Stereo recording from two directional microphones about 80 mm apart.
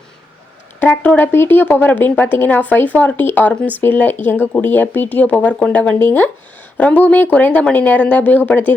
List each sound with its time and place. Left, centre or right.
0.8 s speech: left
6.0 s speech: left